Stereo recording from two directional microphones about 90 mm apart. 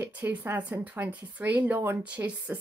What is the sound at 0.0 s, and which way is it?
Speech, 20° right (ahead or behind).